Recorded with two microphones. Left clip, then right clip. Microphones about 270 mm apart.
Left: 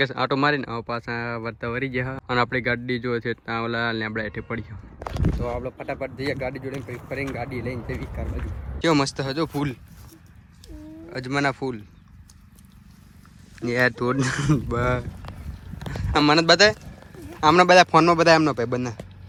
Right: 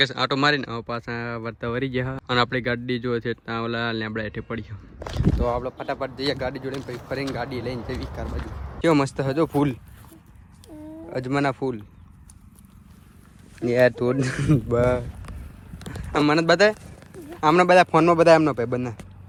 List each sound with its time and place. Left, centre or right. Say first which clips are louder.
0.0 s speech: right 1 dB; centre
4.9 s speech: right 2 dB; centre
7.4 s speech: right 1 dB; right
8.0 s speech: right 2 dB; centre
11.1 s speech: even; centre
13.6 s speech: right 3 dB; centre